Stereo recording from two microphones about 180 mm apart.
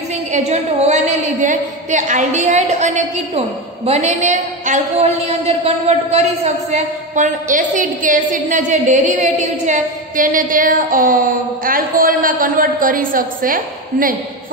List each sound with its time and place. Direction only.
0.1 s a woman's voice: 40° right (ahead or behind)